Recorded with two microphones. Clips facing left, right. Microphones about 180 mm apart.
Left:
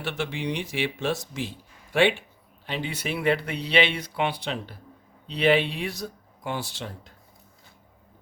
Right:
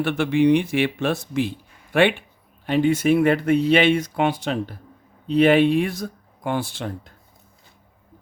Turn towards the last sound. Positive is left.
turn(degrees=-55)  # may be behind; listen again after turning